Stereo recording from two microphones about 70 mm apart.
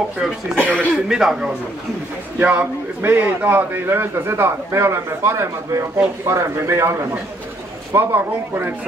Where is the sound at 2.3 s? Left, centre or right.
Right.